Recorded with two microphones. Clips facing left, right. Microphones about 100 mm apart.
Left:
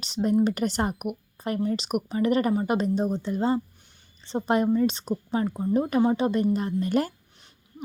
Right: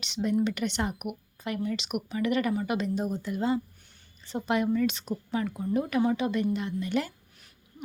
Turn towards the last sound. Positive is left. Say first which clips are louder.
# left 5 dB
turn(degrees=45)  # may be behind; listen again after turning